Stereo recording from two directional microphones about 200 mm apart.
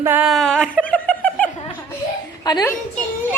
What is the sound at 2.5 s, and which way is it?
Speech, 20° left (ahead or behind).